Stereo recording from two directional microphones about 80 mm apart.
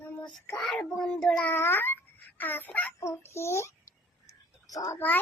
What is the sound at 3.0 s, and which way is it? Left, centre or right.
Speech, left.